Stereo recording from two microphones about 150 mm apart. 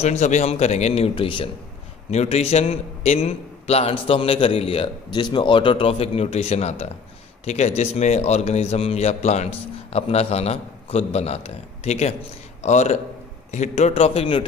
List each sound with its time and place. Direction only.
0.0 s a man's voice: 50° left (ahead or behind)